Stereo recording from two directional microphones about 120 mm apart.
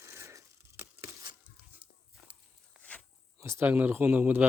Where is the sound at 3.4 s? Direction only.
20° right (ahead or behind).